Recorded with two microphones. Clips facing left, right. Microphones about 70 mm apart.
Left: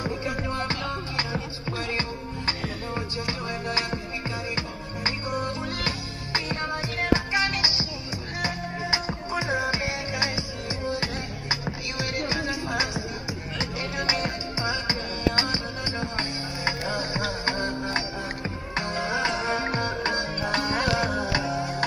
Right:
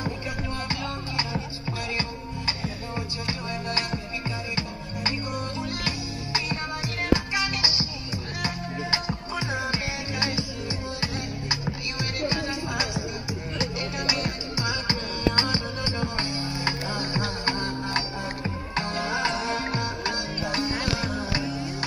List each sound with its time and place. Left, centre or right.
0.6 s music: left
3.3 s music: left
20.5 s music: left